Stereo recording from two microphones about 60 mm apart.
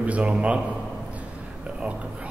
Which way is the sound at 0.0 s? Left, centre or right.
Right.